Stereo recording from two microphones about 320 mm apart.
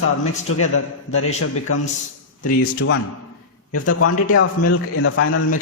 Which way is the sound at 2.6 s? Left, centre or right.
Left.